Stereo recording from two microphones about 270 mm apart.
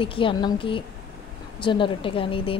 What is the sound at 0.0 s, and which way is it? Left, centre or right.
Speech, centre.